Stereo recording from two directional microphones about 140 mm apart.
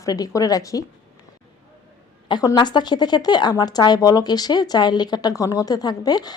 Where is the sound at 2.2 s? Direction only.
30° left (ahead or behind).